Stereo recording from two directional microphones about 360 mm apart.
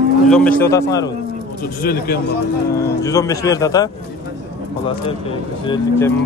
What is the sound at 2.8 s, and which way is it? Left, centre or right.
Speech, centre.